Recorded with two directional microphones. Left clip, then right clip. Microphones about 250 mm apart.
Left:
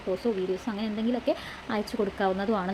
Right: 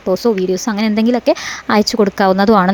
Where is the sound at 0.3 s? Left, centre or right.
Right.